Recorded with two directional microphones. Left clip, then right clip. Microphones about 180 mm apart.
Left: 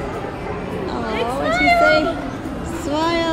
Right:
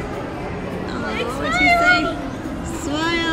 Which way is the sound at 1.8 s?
10° left (ahead or behind).